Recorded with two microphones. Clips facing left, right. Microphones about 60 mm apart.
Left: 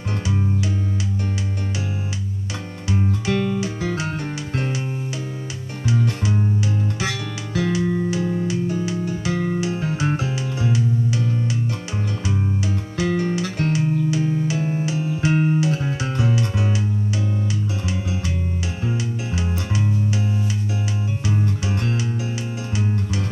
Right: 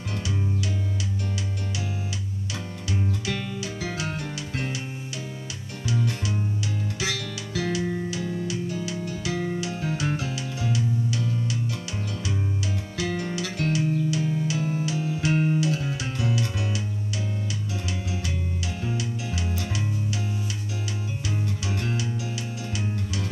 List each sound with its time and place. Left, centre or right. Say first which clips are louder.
2.9 s music: left 7 dB; left
5.9 s music: left 5 dB; left
12.9 s music: left 8 dB; left
17.8 s music: left 5 dB; left